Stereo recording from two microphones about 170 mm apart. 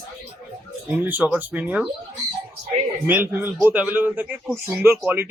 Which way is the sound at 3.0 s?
10° right (ahead or behind).